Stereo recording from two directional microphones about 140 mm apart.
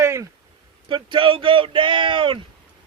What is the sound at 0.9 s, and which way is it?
Speech, 35° right (ahead or behind).